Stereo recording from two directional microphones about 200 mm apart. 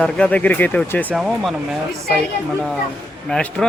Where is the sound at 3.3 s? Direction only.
5° left (ahead or behind).